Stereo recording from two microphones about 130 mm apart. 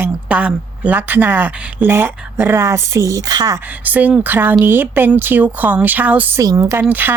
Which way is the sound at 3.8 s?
10° right (ahead or behind).